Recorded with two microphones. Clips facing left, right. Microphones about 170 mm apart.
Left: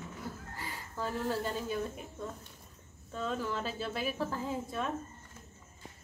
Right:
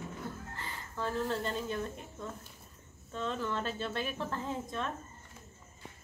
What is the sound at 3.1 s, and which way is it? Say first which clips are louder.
Speech: even; 5° left (ahead or behind).